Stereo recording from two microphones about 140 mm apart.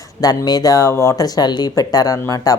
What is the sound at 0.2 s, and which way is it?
Speech, 25° left (ahead or behind).